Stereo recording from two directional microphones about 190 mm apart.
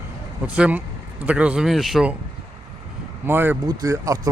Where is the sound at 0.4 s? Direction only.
5° right (ahead or behind).